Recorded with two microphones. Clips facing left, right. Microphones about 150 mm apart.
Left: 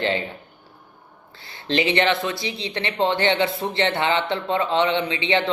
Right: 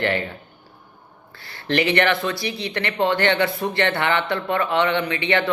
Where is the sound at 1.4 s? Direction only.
20° left (ahead or behind).